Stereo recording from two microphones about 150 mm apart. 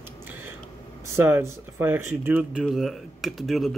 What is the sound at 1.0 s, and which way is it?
Speech, 15° right (ahead or behind).